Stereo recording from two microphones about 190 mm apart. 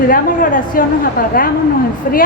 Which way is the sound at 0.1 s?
45° left (ahead or behind).